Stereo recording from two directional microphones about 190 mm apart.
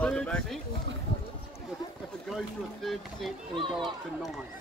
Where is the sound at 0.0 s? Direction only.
5° left (ahead or behind).